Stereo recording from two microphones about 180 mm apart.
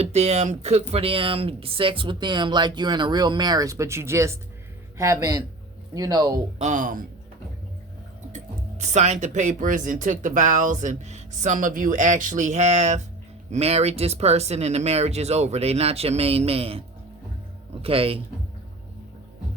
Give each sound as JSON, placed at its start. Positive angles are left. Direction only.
{"t": 0.0, "sound": "speech", "side_deg": -35}
{"t": 6.6, "sound": "speech", "side_deg": -45}
{"t": 8.8, "sound": "speech", "side_deg": -40}
{"t": 17.8, "sound": "speech", "side_deg": -30}